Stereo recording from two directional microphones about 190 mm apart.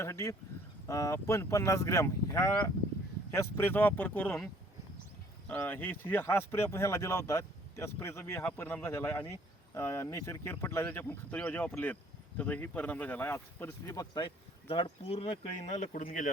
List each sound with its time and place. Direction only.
0.0 s speech: 15° left (ahead or behind)
5.5 s speech: 10° left (ahead or behind); by 16.3 s 45° left (ahead or behind)